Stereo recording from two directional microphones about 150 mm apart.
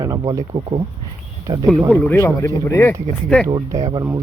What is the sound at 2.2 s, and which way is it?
Speech, 20° left (ahead or behind).